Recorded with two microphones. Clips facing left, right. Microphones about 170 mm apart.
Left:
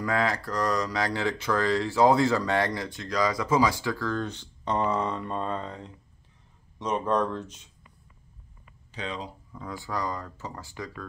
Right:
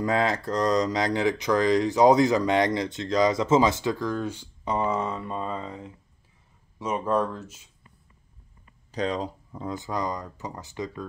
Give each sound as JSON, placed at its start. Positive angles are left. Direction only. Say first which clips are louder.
{"t": 0.0, "sound": "speech", "louder": "right 3 dB", "side_deg": -20}
{"t": 8.9, "sound": "speech", "louder": "right 7 dB", "side_deg": -40}
{"t": 9.6, "sound": "speech", "louder": "right 3 dB", "side_deg": -20}